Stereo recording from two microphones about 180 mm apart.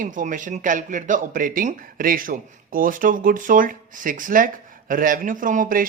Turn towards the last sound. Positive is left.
turn(degrees=-50)  # may be behind; listen again after turning